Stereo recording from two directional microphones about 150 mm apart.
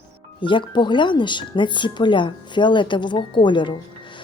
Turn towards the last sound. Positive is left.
turn(degrees=30)  # may be behind; listen again after turning